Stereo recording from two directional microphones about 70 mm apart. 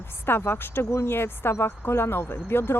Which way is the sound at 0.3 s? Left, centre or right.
Left.